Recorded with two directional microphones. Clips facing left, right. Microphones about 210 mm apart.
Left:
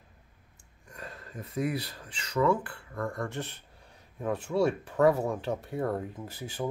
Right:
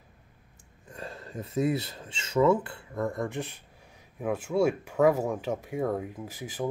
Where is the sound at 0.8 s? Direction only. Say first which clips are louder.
Right 4 dB; 25° right (ahead or behind).